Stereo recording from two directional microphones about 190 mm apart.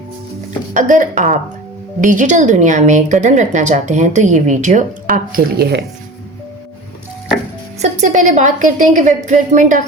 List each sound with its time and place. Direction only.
0.7 s a woman's voice: 40° right (ahead or behind)
7.8 s a woman's voice: 40° right (ahead or behind)